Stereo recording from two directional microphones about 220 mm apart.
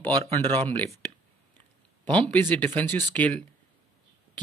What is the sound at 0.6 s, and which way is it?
Speech, 10° left (ahead or behind).